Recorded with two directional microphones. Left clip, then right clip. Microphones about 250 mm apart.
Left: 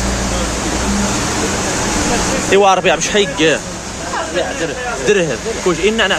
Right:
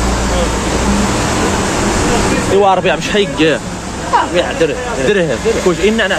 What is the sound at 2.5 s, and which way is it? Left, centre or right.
Speech, left.